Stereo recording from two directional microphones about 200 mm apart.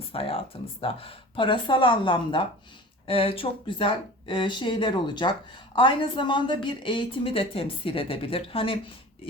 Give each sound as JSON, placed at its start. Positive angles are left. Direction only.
{"t": 0.1, "sound": "a woman's voice", "side_deg": 30}